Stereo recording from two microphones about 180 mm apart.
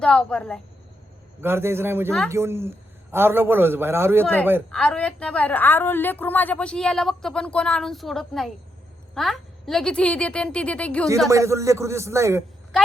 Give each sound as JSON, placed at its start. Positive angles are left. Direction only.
{"t": 0.0, "sound": "a woman's voice", "side_deg": 5}
{"t": 1.4, "sound": "a man's voice", "side_deg": -15}
{"t": 4.7, "sound": "a woman's voice", "side_deg": 5}
{"t": 11.3, "sound": "a man's voice", "side_deg": -15}